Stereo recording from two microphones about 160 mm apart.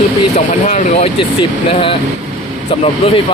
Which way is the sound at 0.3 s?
45° left (ahead or behind).